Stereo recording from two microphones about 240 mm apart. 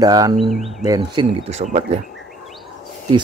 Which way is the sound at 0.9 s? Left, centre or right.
Centre.